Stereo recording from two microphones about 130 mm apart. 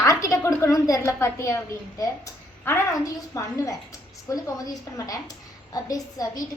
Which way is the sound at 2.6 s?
20° left (ahead or behind).